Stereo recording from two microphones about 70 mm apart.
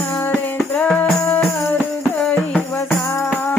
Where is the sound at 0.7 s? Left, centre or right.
Centre.